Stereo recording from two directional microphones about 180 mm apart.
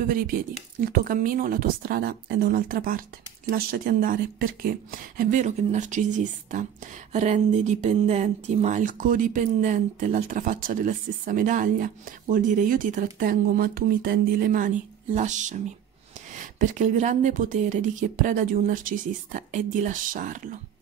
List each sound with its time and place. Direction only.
0.1 s speech: 55° right (ahead or behind)